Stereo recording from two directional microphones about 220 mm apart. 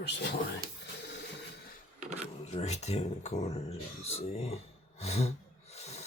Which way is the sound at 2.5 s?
30° left (ahead or behind).